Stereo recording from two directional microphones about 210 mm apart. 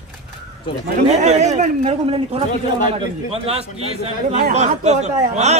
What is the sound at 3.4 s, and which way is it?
Speech, 30° right (ahead or behind).